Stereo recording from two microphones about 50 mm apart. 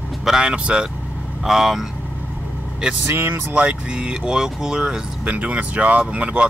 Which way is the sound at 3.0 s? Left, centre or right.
Right.